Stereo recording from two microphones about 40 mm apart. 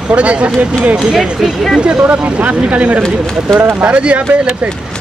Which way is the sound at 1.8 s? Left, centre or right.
Right.